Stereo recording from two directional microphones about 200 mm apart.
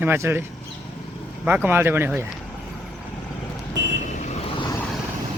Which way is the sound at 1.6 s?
10° right (ahead or behind).